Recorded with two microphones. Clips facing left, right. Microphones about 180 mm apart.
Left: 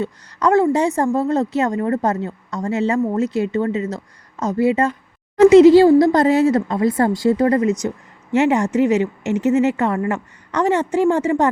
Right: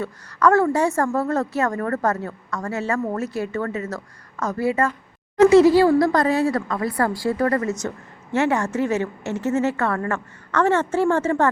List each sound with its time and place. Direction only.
0.0 s a woman's voice: 20° left (ahead or behind)